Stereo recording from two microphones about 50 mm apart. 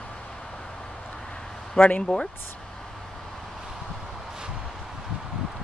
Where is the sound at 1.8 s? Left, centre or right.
Left.